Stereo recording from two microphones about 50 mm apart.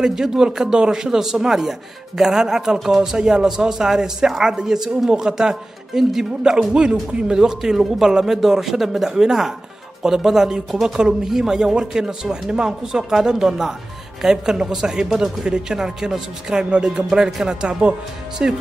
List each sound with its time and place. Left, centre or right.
0.0 s a man's voice: centre